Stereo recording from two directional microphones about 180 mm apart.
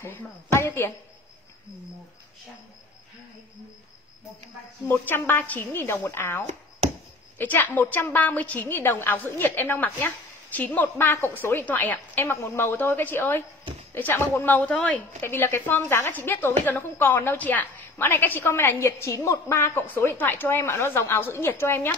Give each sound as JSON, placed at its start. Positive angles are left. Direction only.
{"t": 0.0, "sound": "a woman's voice", "side_deg": 15}
{"t": 4.8, "sound": "a woman's voice", "side_deg": 10}